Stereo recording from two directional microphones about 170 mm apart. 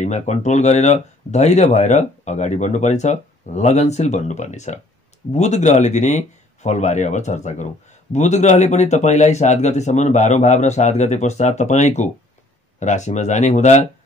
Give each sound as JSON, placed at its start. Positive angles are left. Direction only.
{"t": 0.0, "sound": "speech", "side_deg": 40}